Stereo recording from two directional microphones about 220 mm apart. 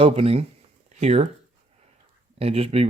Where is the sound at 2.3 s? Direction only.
25° right (ahead or behind).